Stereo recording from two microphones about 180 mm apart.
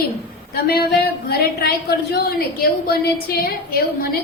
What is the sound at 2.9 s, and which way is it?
A woman's voice, 60° left (ahead or behind).